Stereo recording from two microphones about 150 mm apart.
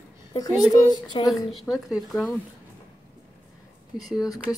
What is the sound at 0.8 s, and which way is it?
Speech, 25° left (ahead or behind).